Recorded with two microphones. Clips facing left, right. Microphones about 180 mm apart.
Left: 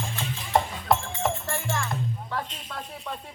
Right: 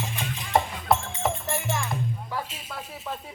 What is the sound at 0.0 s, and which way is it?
Music, 15° right (ahead or behind).